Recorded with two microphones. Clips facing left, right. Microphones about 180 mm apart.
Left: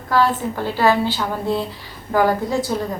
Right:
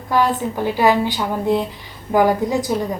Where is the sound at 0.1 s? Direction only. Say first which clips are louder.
Even; 15° right (ahead or behind).